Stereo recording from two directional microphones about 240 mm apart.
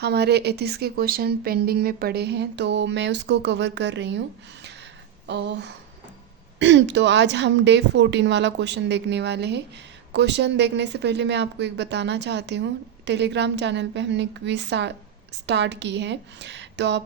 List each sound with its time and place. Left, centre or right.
0.0 s speech: right
5.3 s speech: right